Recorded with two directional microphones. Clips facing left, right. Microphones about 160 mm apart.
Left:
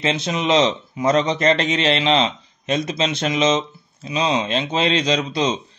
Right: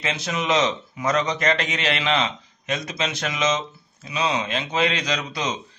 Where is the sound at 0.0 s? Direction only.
25° left (ahead or behind).